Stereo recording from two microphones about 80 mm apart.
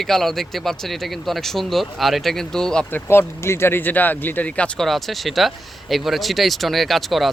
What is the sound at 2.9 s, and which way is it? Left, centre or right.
Speech, left.